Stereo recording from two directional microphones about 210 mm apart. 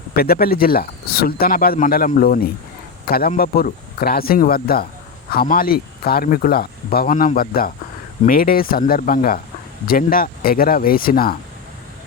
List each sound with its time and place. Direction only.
0.2 s speech: 45° left (ahead or behind)